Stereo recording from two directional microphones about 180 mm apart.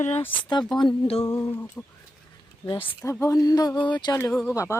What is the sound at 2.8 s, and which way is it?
Speech, 10° left (ahead or behind).